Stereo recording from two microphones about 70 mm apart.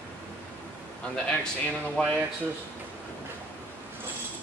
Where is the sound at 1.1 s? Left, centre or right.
Centre.